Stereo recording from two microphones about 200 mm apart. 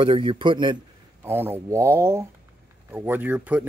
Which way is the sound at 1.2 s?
10° right (ahead or behind).